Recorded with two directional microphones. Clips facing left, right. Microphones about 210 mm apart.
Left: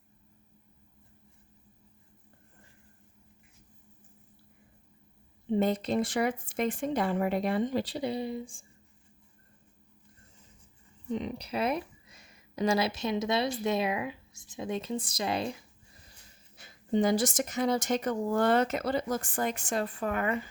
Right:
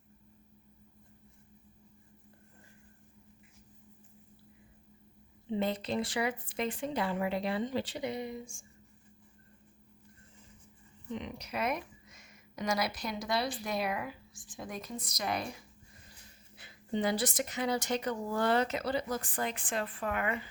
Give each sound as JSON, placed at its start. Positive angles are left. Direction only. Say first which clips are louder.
{"t": 5.5, "sound": "a woman's voice", "louder": "left 5 dB", "side_deg": 45}
{"t": 11.1, "sound": "speech", "louder": "left 6 dB", "side_deg": 35}
{"t": 16.6, "sound": "a woman's voice", "louder": "left 6 dB", "side_deg": 45}